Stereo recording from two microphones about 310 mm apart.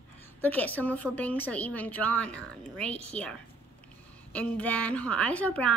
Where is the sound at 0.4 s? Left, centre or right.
Centre.